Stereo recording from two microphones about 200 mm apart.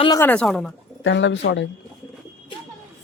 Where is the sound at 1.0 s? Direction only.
65° left (ahead or behind).